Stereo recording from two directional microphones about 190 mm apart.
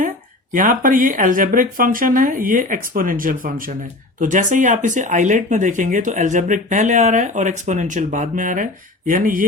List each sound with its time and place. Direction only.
0.5 s speech: 45° right (ahead or behind)